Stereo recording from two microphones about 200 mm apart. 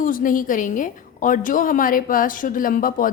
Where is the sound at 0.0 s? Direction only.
45° left (ahead or behind).